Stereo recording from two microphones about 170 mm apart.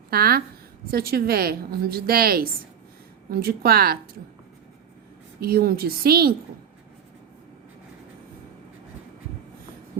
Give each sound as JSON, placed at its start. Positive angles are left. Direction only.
{"t": 0.1, "sound": "a woman's voice", "side_deg": -60}
{"t": 5.4, "sound": "a woman's voice", "side_deg": -60}